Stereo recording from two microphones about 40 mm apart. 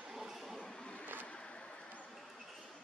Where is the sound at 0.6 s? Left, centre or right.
Centre.